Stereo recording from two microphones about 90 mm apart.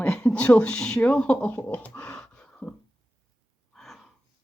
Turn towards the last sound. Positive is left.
turn(degrees=0)  # may be behind; listen again after turning